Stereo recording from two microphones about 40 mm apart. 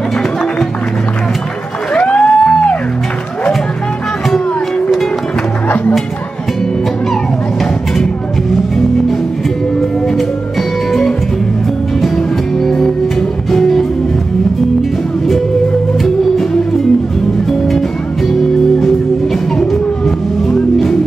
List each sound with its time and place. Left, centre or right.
2.0 s music: left
10.9 s music: centre
12.5 s music: centre
16.0 s music: centre
20.4 s music: centre